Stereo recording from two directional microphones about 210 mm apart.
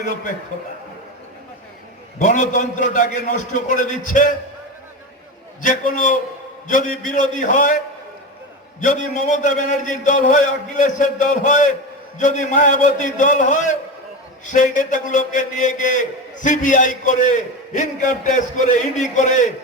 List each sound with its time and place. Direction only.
2.1 s a man's voice: 35° left (ahead or behind)
5.6 s a man's voice: 40° left (ahead or behind)
8.8 s a man's voice: 35° left (ahead or behind)